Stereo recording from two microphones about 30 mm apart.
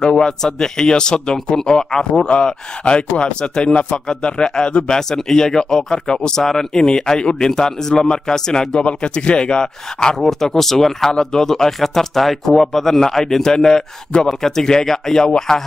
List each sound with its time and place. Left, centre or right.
0.0 s speech: left
2.8 s speech: left
8.8 s speech: left
10.1 s speech: centre
13.0 s speech: centre